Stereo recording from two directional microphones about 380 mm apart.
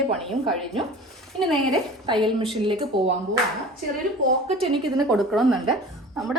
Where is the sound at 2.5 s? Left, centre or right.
Centre.